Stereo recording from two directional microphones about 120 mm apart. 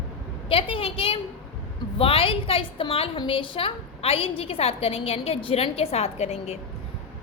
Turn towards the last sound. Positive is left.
turn(degrees=65)  # may be behind; listen again after turning